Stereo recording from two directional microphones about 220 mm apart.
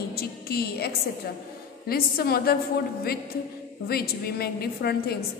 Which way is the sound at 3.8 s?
45° left (ahead or behind).